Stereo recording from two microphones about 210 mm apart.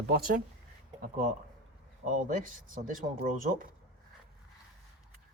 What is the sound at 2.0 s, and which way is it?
Speech, 35° right (ahead or behind).